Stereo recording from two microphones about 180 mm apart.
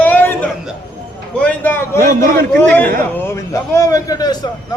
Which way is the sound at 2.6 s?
10° left (ahead or behind).